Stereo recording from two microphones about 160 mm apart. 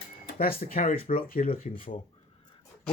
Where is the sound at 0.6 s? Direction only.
60° left (ahead or behind).